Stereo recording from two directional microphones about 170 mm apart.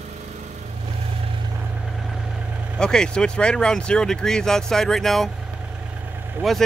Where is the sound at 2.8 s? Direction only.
5° left (ahead or behind).